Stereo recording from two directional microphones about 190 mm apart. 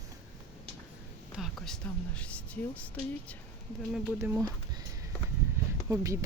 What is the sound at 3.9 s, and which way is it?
Speech, 10° right (ahead or behind).